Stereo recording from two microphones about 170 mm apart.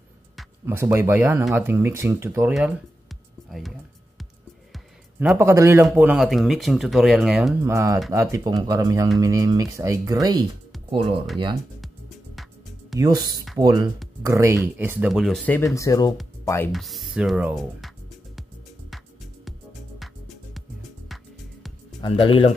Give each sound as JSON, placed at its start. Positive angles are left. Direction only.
{"t": 0.7, "sound": "speech", "side_deg": -15}
{"t": 2.5, "sound": "music", "side_deg": 0}
{"t": 4.7, "sound": "music", "side_deg": 0}
{"t": 5.4, "sound": "speech", "side_deg": -15}
{"t": 7.6, "sound": "speech", "side_deg": -15}
{"t": 12.9, "sound": "speech", "side_deg": -20}
{"t": 16.7, "sound": "speech", "side_deg": 0}
{"t": 22.0, "sound": "speech", "side_deg": 30}